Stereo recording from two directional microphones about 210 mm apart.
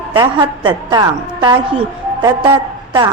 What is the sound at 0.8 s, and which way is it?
A woman's voice, 20° right (ahead or behind).